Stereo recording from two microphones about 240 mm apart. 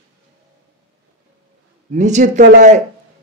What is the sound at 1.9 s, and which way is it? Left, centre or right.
Speech, right.